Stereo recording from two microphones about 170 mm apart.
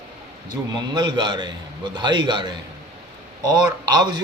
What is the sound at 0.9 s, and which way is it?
A man's voice, 25° right (ahead or behind).